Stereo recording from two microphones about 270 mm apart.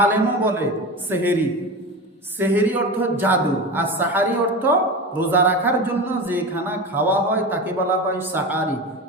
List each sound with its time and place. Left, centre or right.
0.0 s speech: centre
2.4 s speech: centre